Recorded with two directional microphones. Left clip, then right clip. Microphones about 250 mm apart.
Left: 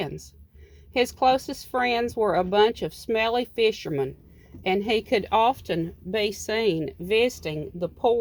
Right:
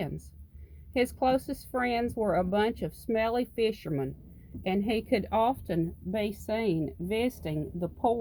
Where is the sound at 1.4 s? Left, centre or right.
Left.